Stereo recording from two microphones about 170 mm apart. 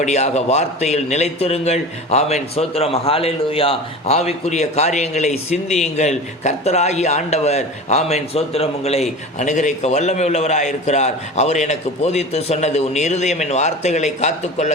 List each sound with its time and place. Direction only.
0.0 s a man's voice: 40° left (ahead or behind)